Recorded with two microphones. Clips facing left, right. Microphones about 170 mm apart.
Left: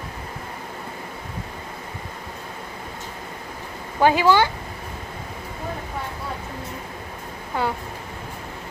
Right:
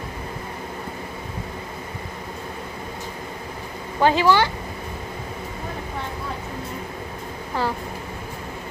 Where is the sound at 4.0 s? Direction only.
15° left (ahead or behind).